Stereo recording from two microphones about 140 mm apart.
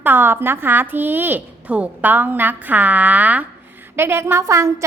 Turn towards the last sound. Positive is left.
turn(degrees=-20)  # may be behind; listen again after turning